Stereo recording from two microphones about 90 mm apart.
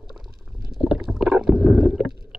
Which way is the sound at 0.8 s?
5° right (ahead or behind).